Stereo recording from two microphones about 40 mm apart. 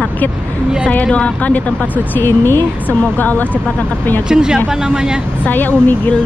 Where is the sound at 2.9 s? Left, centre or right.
Left.